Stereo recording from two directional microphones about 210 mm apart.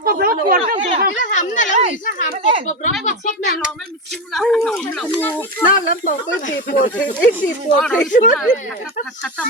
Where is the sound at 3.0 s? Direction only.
40° left (ahead or behind).